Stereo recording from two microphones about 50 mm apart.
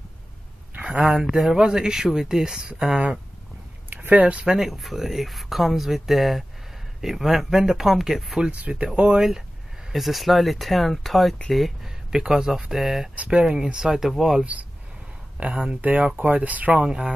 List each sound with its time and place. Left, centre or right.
0.8 s speech: centre
4.1 s speech: right
4.5 s speech: centre
8.4 s speech: right
9.9 s speech: centre
12.1 s speech: centre
13.1 s speech: right; by 14.4 s centre
14.4 s speech: right